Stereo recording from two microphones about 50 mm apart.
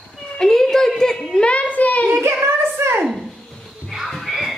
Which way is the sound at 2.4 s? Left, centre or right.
Right.